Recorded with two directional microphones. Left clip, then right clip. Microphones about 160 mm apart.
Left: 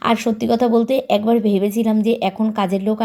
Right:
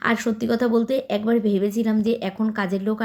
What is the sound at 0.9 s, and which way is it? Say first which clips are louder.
Speech: left 5 dB; 30° right (ahead or behind).